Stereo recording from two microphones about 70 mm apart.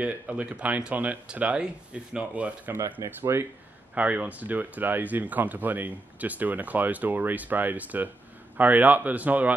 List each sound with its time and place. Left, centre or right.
0.0 s speech: centre
3.1 s speech: right